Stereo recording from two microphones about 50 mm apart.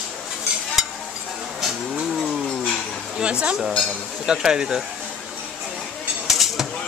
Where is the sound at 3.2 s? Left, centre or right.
Right.